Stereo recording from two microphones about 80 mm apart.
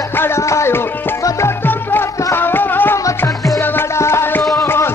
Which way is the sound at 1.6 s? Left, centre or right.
Left.